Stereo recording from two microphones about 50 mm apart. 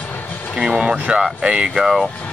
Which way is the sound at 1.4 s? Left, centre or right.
Centre.